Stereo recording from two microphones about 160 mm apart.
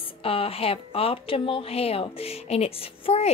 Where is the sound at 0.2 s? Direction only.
35° left (ahead or behind).